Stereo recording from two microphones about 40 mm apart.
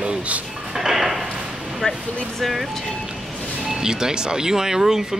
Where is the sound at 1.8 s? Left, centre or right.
Left.